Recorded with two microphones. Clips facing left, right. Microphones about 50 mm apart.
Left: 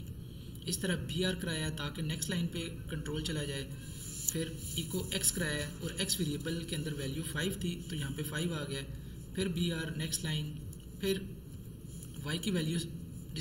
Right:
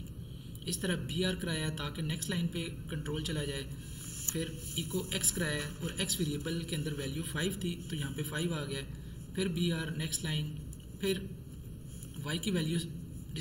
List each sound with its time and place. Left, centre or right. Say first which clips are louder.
0.7 s speech: even; centre
4.8 s speech: right 2 dB; right
5.1 s speech: left 1 dB; centre
5.6 s speech: right 1 dB; right
5.9 s a man's voice: right 1 dB; centre